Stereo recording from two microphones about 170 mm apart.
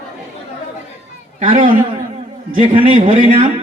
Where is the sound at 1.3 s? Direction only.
50° right (ahead or behind).